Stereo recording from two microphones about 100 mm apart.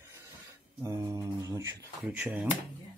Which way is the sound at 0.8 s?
30° right (ahead or behind).